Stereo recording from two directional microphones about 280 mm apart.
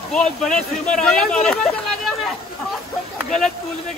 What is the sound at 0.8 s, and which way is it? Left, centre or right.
Speech, centre.